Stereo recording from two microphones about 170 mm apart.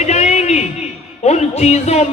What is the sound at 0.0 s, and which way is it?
A man's voice, 40° left (ahead or behind).